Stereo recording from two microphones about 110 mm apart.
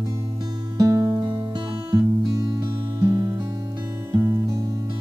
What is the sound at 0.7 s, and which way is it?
Music, 30° right (ahead or behind).